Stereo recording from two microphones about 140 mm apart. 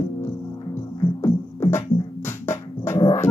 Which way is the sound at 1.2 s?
20° left (ahead or behind).